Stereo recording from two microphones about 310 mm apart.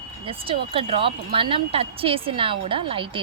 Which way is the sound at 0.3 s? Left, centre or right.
Centre.